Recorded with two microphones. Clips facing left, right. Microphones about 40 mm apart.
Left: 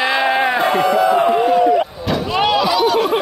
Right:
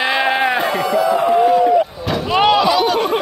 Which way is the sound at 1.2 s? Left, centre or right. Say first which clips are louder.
Right 2 dB; centre.